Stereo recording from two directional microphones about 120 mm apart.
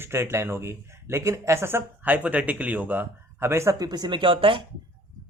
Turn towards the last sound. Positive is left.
turn(degrees=-45)  # may be behind; listen again after turning